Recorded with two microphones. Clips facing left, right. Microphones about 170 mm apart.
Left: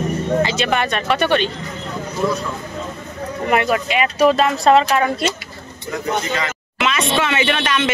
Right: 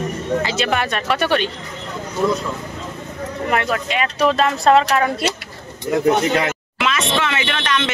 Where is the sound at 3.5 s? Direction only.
10° left (ahead or behind).